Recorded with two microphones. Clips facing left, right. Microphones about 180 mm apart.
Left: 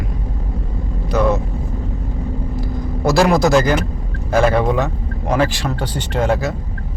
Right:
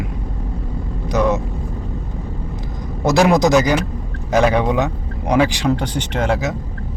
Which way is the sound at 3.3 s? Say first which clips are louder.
Even; 20° right (ahead or behind).